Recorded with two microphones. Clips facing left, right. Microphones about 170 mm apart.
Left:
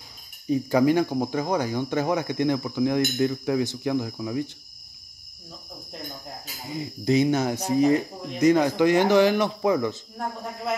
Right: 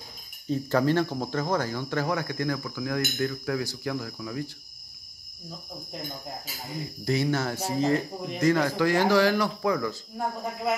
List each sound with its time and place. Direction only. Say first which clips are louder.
0.5 s speech: left 4 dB; 10° left (ahead or behind)
6.7 s speech: left 6 dB; 20° left (ahead or behind)